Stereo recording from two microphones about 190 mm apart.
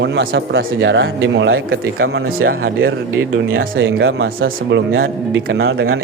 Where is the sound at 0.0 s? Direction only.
65° right (ahead or behind); by 1.8 s 85° right.